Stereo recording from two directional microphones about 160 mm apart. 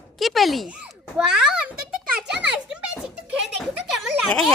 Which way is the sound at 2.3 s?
5° right (ahead or behind).